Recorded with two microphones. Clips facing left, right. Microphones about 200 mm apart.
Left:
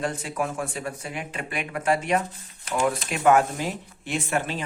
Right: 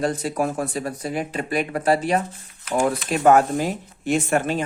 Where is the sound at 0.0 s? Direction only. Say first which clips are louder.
Right 5 dB; 35° right (ahead or behind).